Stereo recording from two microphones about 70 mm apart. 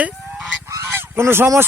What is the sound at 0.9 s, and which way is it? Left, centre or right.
Goose, right.